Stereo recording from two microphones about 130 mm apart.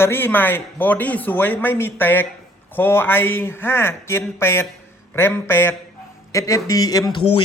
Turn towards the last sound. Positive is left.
turn(degrees=30)  # may be behind; listen again after turning